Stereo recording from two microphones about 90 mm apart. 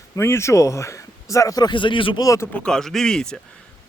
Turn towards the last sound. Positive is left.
turn(degrees=5)  # may be behind; listen again after turning